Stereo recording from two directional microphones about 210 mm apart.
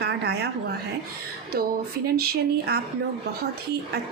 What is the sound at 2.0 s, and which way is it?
Speech, 45° right (ahead or behind).